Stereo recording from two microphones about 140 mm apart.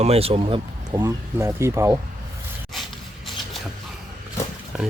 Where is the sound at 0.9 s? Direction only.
20° right (ahead or behind).